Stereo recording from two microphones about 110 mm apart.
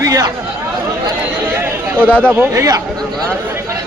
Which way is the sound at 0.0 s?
30° right (ahead or behind).